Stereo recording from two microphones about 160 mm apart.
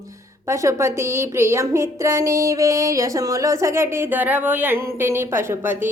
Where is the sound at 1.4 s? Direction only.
15° right (ahead or behind).